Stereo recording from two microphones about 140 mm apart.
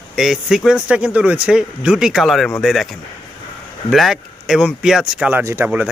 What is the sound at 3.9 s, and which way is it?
Speech, centre (ahead or behind).